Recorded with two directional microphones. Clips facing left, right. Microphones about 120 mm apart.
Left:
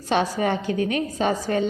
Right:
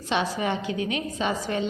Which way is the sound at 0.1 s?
45° left (ahead or behind).